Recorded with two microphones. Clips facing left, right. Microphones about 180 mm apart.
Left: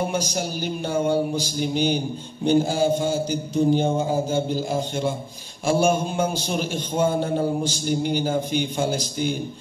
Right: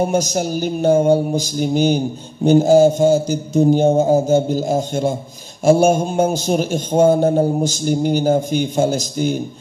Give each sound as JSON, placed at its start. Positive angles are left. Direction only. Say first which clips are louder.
{"t": 0.0, "sound": "a man's voice", "louder": "right 7 dB", "side_deg": -45}